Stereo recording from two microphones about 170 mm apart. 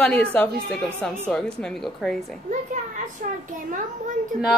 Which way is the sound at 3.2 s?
55° right (ahead or behind).